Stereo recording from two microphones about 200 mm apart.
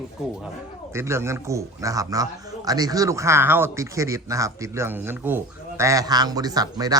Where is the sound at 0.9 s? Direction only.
15° right (ahead or behind).